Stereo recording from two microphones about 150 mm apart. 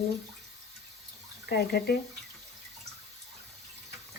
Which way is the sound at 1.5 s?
90° left.